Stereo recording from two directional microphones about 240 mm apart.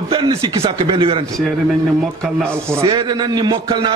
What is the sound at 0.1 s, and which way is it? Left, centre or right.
A man's voice, right.